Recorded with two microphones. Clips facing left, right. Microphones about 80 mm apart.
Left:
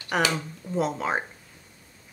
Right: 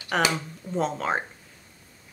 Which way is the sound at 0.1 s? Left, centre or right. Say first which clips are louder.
Even; centre.